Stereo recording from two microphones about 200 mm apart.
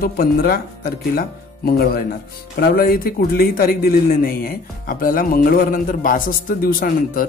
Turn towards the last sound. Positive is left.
turn(degrees=45)  # may be behind; listen again after turning